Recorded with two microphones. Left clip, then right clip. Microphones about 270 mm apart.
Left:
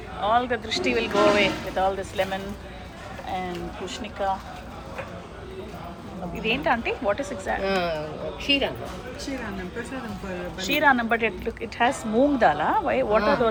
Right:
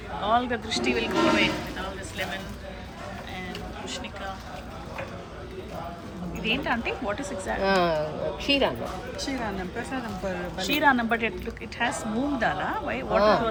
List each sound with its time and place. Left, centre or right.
0.2 s speech: centre
6.4 s speech: centre
7.6 s speech: right
10.6 s speech: centre
13.1 s speech: right